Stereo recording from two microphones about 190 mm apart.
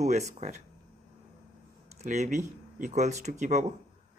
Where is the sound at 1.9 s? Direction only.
40° right (ahead or behind).